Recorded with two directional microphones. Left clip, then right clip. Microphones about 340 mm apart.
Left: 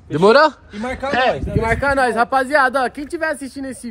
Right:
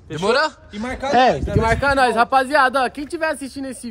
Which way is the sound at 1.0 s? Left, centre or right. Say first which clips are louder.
Right 2 dB; right.